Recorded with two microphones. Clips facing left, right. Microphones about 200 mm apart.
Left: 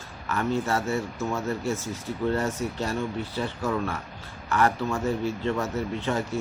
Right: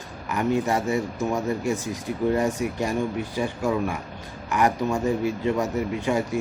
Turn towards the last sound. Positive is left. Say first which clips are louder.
# right 3 dB
turn(degrees=-15)  # may be behind; listen again after turning